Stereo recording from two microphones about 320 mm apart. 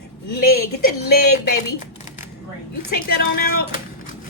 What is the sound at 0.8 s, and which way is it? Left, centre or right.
Speech, left.